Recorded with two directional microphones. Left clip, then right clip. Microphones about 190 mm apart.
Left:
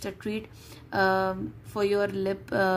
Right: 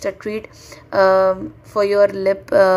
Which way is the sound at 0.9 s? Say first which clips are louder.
Right 12 dB; 20° left (ahead or behind).